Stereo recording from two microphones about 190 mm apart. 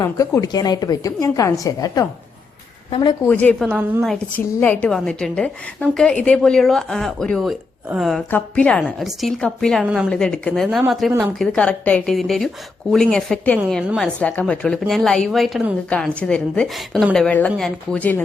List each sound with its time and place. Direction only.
0.0 s a woman's voice: 15° left (ahead or behind)
3.7 s a woman's voice: 10° right (ahead or behind)
4.0 s a woman's voice: 5° left (ahead or behind)